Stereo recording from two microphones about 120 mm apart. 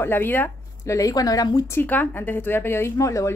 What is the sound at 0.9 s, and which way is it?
Speech, 30° left (ahead or behind).